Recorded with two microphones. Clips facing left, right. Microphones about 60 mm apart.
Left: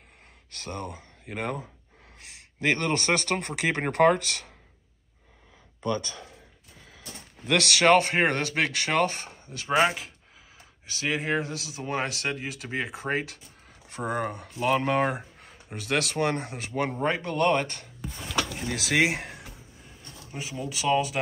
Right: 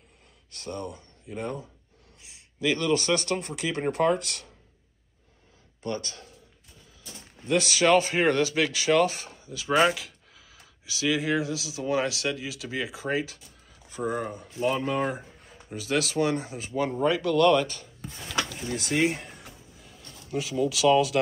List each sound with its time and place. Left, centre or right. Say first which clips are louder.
0.5 s speech: right 1 dB; left
2.1 s speech: left 1 dB; left
7.0 s speech: left 2 dB; left
10.9 s speech: right 2 dB; left
17.0 s speech: right 5 dB; left
17.6 s speech: even; left
18.8 s speech: left 1 dB; left
20.2 s speech: right 8 dB; left